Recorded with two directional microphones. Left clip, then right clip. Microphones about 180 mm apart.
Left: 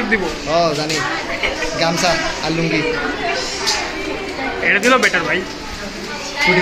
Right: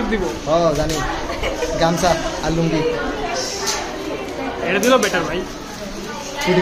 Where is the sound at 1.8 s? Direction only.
50° right (ahead or behind).